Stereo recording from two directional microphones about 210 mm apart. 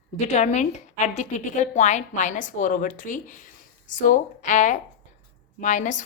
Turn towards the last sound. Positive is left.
turn(degrees=35)  # may be behind; listen again after turning